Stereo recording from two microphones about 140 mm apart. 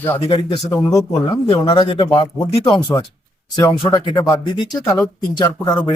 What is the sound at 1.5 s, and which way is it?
A man's voice, 35° left (ahead or behind).